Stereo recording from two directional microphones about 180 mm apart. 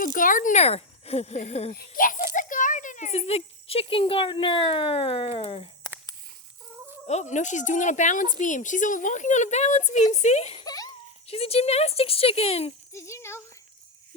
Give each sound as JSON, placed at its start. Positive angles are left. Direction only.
{"t": 0.0, "sound": "speech", "side_deg": 50}
{"t": 1.7, "sound": "a child's voice", "side_deg": 50}
{"t": 7.1, "sound": "speech", "side_deg": 40}
{"t": 10.6, "sound": "a sound", "side_deg": 20}
{"t": 11.3, "sound": "speech", "side_deg": 35}
{"t": 12.9, "sound": "speech", "side_deg": 15}